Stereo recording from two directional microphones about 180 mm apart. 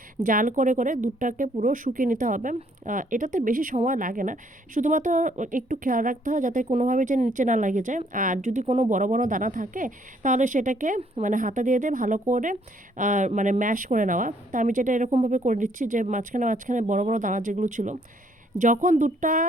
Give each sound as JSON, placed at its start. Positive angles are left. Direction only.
{"t": 0.2, "sound": "speech", "side_deg": -50}